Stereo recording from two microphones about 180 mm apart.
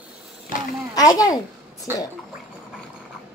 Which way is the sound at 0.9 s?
20° left (ahead or behind).